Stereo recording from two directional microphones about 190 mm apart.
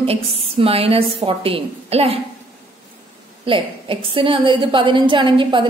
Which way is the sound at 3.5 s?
25° right (ahead or behind).